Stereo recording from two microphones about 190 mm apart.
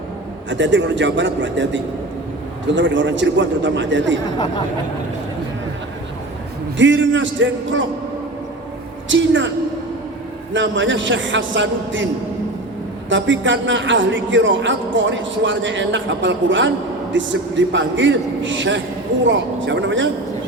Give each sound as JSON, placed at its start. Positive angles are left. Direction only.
{"t": 0.5, "sound": "a man's voice", "side_deg": -75}
{"t": 6.7, "sound": "a man's voice", "side_deg": -80}
{"t": 9.0, "sound": "a man's voice", "side_deg": -75}
{"t": 10.5, "sound": "a man's voice", "side_deg": -75}
{"t": 13.1, "sound": "a man's voice", "side_deg": -75}